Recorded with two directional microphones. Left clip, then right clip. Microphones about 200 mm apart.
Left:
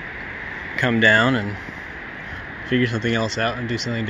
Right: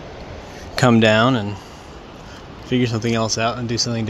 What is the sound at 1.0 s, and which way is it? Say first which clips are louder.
Speech: left 2 dB; 15° right (ahead or behind).